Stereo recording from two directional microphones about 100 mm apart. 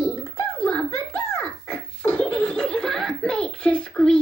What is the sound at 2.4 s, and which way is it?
Giggle, 5° left (ahead or behind).